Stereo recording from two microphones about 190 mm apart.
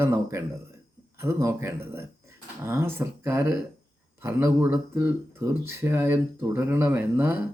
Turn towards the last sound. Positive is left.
turn(degrees=-10)  # may be behind; listen again after turning